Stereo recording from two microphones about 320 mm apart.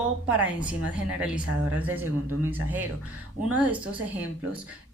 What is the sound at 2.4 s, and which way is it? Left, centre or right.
A woman's voice, centre.